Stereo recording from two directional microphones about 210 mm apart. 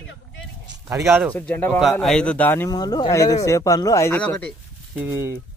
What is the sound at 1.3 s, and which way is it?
Speech, 10° left (ahead or behind).